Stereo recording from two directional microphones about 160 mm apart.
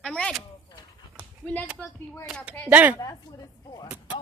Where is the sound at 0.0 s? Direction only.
5° left (ahead or behind).